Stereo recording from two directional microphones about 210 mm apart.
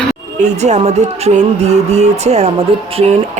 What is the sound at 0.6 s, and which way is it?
Speech, 30° right (ahead or behind).